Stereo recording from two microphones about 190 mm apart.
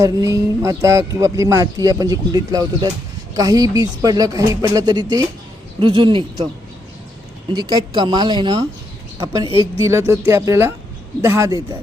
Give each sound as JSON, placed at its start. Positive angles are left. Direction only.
{"t": 0.0, "sound": "speech", "side_deg": -15}
{"t": 7.5, "sound": "speech", "side_deg": -20}